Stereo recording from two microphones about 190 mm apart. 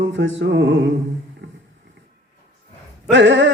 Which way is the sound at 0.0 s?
75° right (ahead or behind).